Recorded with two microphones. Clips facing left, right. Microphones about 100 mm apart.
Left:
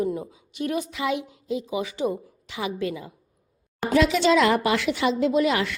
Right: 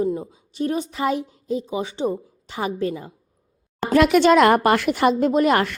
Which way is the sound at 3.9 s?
55° right (ahead or behind).